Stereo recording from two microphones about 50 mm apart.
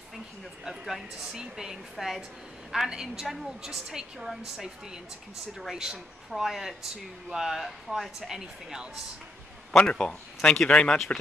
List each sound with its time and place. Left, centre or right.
0.7 s speech: centre
5.7 s speech: centre
9.7 s a man's voice: centre
10.7 s speech: left